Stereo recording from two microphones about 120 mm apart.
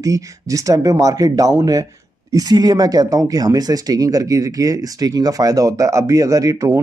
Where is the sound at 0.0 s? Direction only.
30° right (ahead or behind).